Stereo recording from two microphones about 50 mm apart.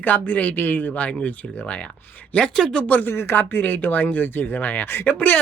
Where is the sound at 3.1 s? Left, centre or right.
Left.